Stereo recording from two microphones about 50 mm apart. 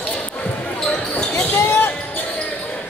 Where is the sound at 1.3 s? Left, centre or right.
Left.